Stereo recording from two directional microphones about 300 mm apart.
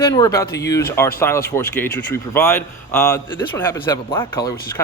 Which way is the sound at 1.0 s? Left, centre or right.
Centre.